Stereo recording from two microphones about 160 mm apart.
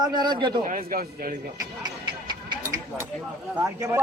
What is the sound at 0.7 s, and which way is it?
Speech, 65° right (ahead or behind).